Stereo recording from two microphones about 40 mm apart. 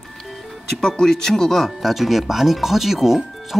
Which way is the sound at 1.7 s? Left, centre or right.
Centre.